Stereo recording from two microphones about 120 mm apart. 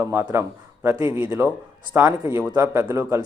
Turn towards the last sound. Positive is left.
turn(degrees=-20)  # may be behind; listen again after turning